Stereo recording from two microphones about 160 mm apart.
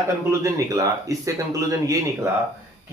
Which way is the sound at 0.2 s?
20° right (ahead or behind).